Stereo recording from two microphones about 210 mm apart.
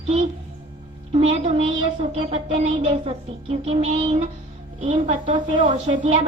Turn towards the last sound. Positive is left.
turn(degrees=-25)  # may be behind; listen again after turning